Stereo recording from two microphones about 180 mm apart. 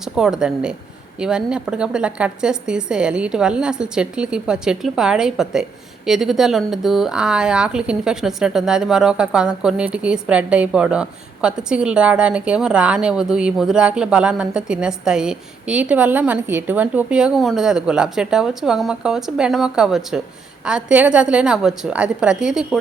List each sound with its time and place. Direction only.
0.0 s speech: 5° right (ahead or behind)